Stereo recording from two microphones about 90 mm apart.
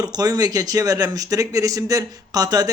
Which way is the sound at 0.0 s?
45° right (ahead or behind).